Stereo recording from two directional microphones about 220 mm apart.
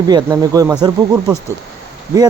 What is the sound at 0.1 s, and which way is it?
Speech, 15° right (ahead or behind).